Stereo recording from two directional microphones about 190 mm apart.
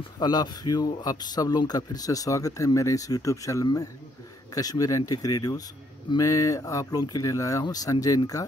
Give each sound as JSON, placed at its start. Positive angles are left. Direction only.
{"t": 0.2, "sound": "speech", "side_deg": 20}